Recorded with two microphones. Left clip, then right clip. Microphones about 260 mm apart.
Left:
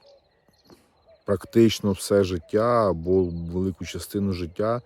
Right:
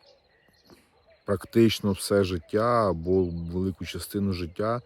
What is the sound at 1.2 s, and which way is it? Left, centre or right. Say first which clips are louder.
Speech: left 3 dB; centre.